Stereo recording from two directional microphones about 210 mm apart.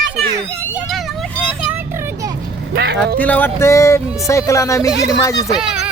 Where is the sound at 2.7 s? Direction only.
50° right (ahead or behind).